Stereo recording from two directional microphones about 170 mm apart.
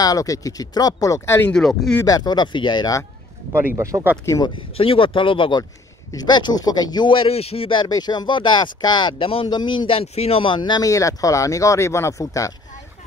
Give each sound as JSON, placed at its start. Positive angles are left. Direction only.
{"t": 0.0, "sound": "speech", "side_deg": 20}
{"t": 1.5, "sound": "speech", "side_deg": 0}
{"t": 2.0, "sound": "speech", "side_deg": 20}
{"t": 3.6, "sound": "speech", "side_deg": -20}
{"t": 4.7, "sound": "speech", "side_deg": 30}